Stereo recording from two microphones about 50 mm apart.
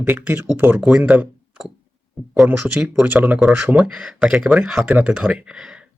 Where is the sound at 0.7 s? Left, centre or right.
Right.